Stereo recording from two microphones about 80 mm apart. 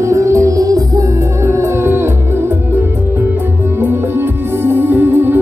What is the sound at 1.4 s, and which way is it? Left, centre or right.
Music, right.